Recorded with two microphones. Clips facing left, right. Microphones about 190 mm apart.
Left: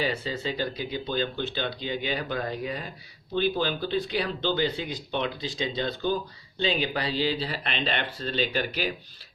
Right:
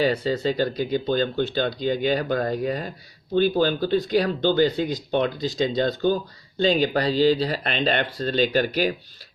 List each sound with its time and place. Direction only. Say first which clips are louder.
0.0 s speech: right 7 dB; 40° right (ahead or behind)